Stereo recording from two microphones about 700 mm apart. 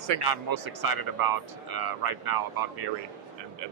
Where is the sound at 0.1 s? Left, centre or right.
Right.